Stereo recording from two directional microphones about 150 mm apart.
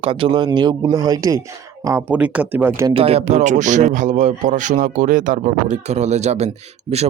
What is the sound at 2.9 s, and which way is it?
A man's voice, 40° right (ahead or behind).